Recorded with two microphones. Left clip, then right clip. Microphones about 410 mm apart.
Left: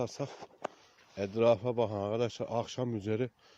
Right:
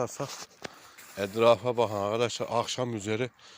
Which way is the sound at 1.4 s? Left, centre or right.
Left.